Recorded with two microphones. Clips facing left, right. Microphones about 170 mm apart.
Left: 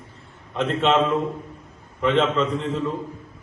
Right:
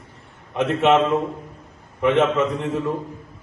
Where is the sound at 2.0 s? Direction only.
15° right (ahead or behind).